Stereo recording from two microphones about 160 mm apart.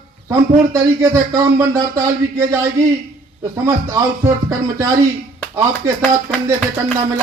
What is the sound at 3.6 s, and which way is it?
Speech, 15° right (ahead or behind).